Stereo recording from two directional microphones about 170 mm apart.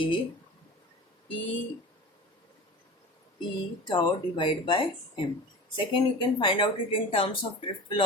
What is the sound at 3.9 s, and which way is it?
Speech, 25° left (ahead or behind).